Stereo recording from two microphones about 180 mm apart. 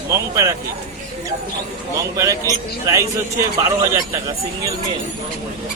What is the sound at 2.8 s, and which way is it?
Speech, 15° right (ahead or behind).